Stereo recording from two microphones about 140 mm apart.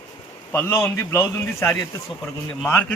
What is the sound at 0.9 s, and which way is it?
A man's voice, 20° left (ahead or behind).